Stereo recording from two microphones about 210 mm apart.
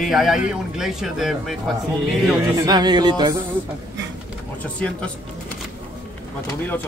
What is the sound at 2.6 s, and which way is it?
Speech, 20° right (ahead or behind).